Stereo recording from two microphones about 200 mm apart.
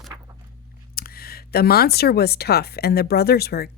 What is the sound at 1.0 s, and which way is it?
Speech, 50° left (ahead or behind).